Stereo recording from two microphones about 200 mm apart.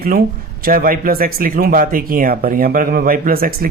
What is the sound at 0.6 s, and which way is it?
Speech, 45° right (ahead or behind).